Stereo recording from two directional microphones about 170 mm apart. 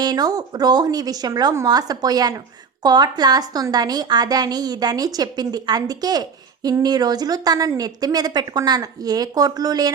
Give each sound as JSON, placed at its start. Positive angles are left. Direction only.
{"t": 0.0, "sound": "a woman's voice", "side_deg": -25}